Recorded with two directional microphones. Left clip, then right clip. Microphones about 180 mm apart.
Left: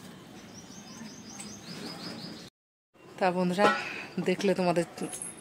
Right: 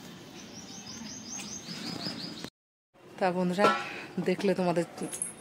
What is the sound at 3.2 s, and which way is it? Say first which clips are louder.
Speech: left 1 dB; 10° left (ahead or behind).